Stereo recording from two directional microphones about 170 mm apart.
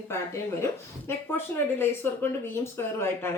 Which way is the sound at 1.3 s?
10° left (ahead or behind).